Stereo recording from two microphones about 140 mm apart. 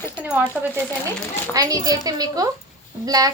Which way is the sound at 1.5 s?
25° right (ahead or behind).